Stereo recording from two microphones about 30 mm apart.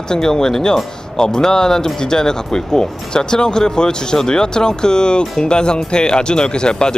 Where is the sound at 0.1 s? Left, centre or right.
Centre.